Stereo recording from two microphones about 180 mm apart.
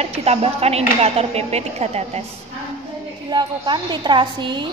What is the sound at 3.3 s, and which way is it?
A woman's voice, 25° right (ahead or behind).